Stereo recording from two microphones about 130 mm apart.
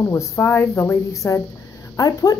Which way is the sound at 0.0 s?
20° left (ahead or behind).